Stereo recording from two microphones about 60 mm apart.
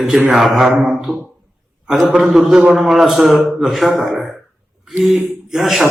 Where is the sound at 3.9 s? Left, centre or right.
Right.